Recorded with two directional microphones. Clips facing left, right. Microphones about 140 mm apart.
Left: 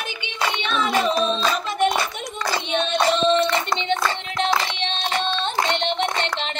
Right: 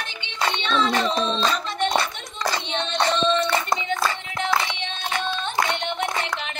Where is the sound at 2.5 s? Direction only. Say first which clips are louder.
Left 7 dB; 15° left (ahead or behind).